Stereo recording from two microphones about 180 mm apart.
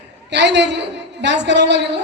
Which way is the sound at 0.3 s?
75° right (ahead or behind).